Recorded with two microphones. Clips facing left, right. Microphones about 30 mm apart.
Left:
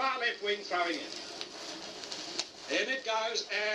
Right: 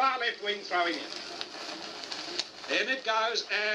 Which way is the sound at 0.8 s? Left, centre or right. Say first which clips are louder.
Right 6 dB; right.